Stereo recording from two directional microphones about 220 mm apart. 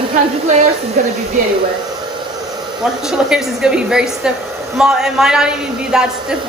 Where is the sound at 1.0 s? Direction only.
35° right (ahead or behind).